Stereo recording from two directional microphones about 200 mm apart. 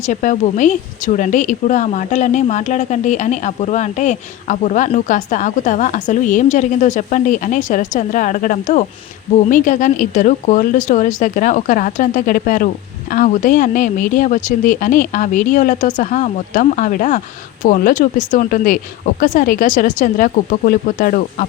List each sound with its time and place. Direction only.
0.0 s speech: 40° left (ahead or behind)